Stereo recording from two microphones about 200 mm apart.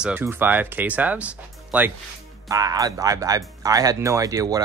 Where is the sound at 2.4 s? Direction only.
20° right (ahead or behind).